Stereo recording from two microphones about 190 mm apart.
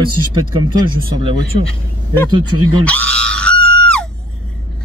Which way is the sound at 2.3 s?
20° right (ahead or behind).